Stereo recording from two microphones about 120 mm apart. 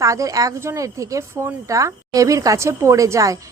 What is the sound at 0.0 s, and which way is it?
Speech, 25° right (ahead or behind).